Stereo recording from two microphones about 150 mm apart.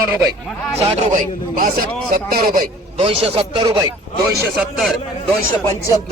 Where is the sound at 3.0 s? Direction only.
40° right (ahead or behind).